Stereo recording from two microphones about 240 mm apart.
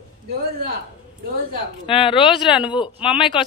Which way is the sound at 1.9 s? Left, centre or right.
Left.